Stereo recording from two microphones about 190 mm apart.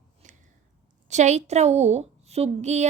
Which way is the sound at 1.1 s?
35° right (ahead or behind).